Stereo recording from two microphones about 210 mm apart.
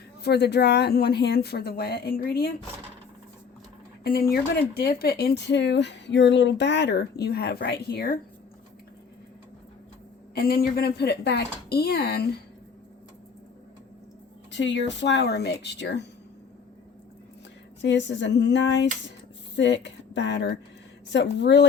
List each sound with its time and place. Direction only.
0.2 s speech: 50° left (ahead or behind)
4.0 s speech: 45° left (ahead or behind)
10.3 s speech: 45° left (ahead or behind)
14.5 s speech: 60° left (ahead or behind)
17.8 s speech: 60° left (ahead or behind)